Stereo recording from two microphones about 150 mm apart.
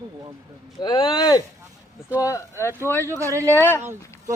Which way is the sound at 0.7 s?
30° left (ahead or behind).